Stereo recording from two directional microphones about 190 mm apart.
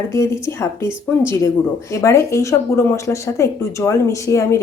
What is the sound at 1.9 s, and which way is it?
Speech, 15° left (ahead or behind).